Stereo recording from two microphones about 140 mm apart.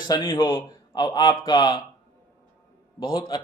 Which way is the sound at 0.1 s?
35° left (ahead or behind).